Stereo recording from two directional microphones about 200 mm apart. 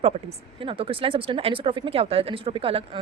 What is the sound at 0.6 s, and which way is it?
Speech, 25° right (ahead or behind).